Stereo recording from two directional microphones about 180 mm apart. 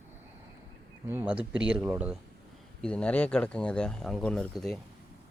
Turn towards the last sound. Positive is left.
turn(degrees=0)  # may be behind; listen again after turning